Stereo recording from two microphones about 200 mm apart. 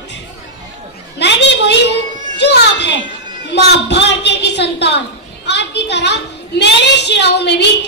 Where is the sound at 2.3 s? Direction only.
60° left (ahead or behind).